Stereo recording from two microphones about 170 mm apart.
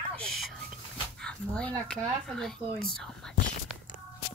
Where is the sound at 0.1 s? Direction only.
5° left (ahead or behind).